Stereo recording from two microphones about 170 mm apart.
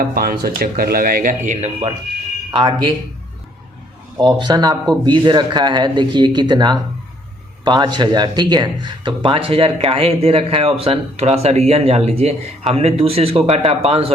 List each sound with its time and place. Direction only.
0.0 s speech: 60° right (ahead or behind); by 1.9 s 45° right (ahead or behind)
2.5 s speech: 30° right (ahead or behind)
4.2 s speech: 25° right (ahead or behind)